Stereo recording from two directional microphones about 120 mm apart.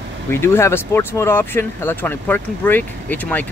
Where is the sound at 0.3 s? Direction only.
20° left (ahead or behind).